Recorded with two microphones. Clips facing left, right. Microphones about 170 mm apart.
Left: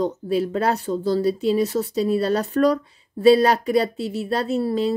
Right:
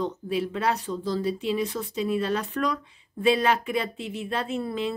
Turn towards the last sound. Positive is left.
turn(degrees=35)  # may be behind; listen again after turning